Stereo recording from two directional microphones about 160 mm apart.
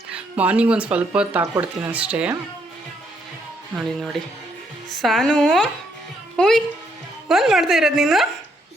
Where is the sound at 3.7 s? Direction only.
Centre (ahead or behind).